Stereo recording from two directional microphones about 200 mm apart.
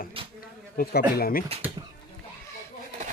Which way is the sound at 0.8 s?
50° left (ahead or behind).